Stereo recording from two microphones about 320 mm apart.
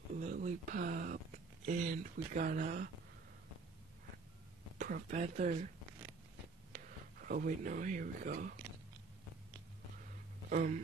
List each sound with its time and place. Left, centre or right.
0.2 s speech: right
4.7 s speech: right
7.2 s speech: right
10.5 s a sound: right